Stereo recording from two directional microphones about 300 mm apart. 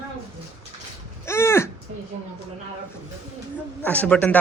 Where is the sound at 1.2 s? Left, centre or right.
Centre.